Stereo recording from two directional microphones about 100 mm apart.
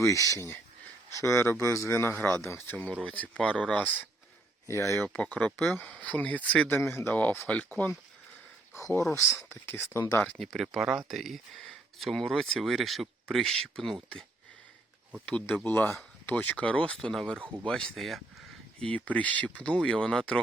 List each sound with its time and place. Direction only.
0.0 s speech: 35° left (ahead or behind)
2.6 s speech: 10° left (ahead or behind)
4.7 s speech: 30° left (ahead or behind)
5.0 s speech: 10° left (ahead or behind)
9.1 s speech: 30° left (ahead or behind)
10.2 s speech: 5° left (ahead or behind)
15.3 s speech: 15° left (ahead or behind)
18.8 s speech: 15° left (ahead or behind)